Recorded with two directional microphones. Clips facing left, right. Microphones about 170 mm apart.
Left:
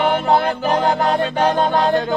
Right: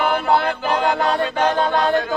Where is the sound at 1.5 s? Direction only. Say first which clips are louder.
Left 2 dB; 20° left (ahead or behind).